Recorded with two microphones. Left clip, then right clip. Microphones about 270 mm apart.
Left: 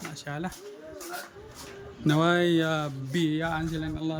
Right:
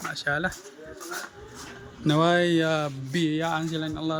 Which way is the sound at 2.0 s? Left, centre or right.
Centre.